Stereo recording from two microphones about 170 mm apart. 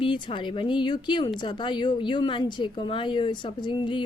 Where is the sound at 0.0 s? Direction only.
30° left (ahead or behind).